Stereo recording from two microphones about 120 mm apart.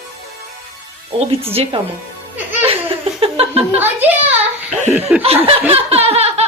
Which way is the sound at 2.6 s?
50° right (ahead or behind).